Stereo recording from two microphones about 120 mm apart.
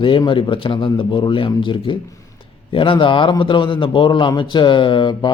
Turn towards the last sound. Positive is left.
turn(degrees=40)  # may be behind; listen again after turning